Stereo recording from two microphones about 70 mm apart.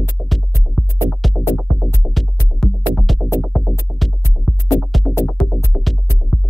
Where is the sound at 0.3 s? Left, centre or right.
Centre.